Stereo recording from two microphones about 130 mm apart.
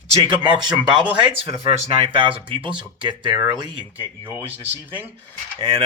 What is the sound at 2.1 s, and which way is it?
Speech, 40° right (ahead or behind).